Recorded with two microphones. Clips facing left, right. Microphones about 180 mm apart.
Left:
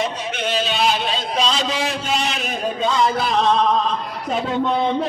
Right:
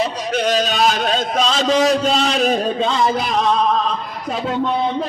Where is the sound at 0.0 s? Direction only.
40° right (ahead or behind).